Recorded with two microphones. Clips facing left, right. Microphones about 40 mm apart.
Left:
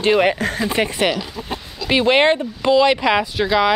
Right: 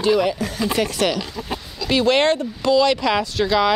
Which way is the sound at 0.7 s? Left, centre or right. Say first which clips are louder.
Even; left.